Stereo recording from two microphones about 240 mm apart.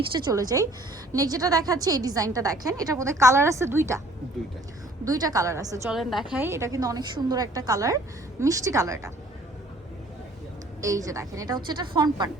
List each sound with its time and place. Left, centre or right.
0.3 s a woman's voice: centre
5.0 s a woman's voice: centre
5.9 s a woman's voice: centre
10.8 s a woman's voice: centre